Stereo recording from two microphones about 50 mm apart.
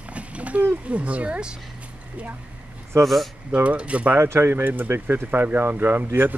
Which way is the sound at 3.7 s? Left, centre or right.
Right.